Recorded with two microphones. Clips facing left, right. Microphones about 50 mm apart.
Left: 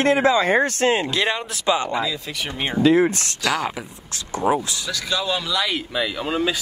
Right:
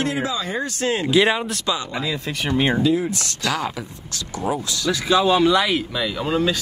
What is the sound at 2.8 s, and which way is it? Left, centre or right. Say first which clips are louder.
Speech: left 4 dB; left.